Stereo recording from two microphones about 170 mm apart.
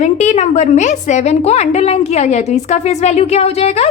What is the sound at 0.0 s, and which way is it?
A woman's voice, 45° left (ahead or behind).